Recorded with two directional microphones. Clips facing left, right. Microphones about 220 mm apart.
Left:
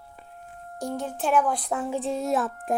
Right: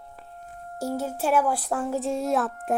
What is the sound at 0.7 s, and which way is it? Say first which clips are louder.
A woman's voice: right 2 dB; 5° right (ahead or behind).